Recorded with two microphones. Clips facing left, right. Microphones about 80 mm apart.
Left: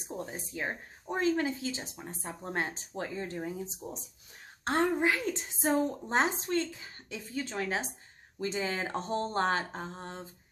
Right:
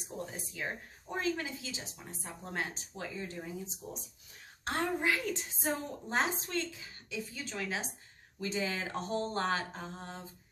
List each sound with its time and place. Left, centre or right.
0.3 s speech: left
4.6 s a woman's voice: left